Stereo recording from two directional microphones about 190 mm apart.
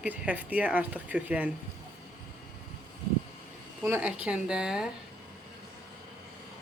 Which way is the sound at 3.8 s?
10° right (ahead or behind).